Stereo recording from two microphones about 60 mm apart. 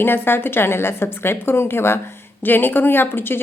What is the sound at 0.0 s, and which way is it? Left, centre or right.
A woman's voice, left.